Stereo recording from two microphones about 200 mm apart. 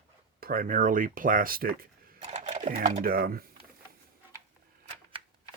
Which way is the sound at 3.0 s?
50° right (ahead or behind).